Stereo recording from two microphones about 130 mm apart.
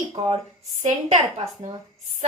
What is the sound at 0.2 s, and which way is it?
A woman's voice, 55° right (ahead or behind).